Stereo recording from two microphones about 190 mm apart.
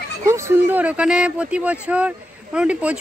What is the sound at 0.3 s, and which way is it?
Speech, 15° right (ahead or behind).